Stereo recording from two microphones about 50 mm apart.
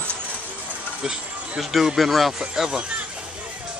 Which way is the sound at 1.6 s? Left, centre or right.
Centre.